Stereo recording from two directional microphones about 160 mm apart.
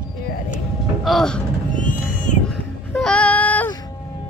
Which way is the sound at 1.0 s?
Centre (ahead or behind).